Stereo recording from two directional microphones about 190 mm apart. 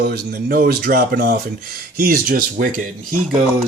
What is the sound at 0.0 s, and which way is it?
Speech, 55° right (ahead or behind).